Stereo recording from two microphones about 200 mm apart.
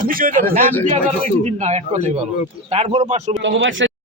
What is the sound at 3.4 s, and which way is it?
Speech, 65° right (ahead or behind).